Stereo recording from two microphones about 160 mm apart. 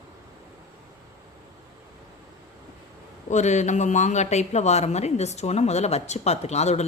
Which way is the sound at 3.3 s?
45° left (ahead or behind).